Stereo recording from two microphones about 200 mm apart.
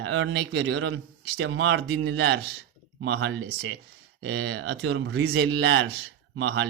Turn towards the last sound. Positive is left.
turn(degrees=-60)  # may be behind; listen again after turning